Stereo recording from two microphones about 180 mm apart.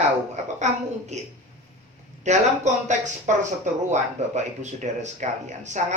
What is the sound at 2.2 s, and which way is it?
Speech, 40° right (ahead or behind).